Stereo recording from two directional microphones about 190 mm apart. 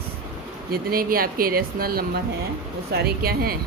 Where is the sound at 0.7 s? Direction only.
50° right (ahead or behind).